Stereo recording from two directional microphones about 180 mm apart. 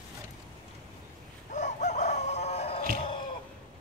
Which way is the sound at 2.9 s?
30° left (ahead or behind).